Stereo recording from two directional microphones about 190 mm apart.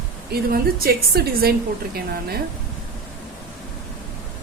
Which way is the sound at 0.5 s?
55° right (ahead or behind).